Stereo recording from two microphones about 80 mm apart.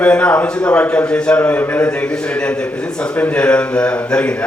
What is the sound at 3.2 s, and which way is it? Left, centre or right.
A man's voice, centre.